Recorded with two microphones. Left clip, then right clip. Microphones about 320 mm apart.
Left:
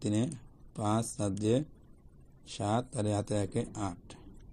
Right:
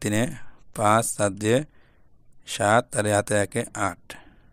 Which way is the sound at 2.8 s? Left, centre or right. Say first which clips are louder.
Right 12 dB; right.